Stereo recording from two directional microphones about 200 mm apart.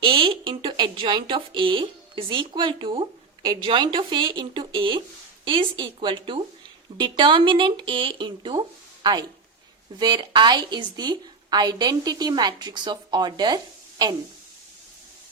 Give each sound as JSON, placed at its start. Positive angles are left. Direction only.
{"t": 0.0, "sound": "a woman's voice", "side_deg": -25}